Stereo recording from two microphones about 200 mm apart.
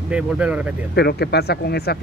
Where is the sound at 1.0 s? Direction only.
55° left (ahead or behind).